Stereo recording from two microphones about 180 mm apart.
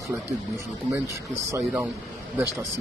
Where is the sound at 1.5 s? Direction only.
15° right (ahead or behind).